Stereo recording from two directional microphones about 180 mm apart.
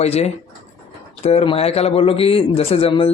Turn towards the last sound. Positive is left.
turn(degrees=30)  # may be behind; listen again after turning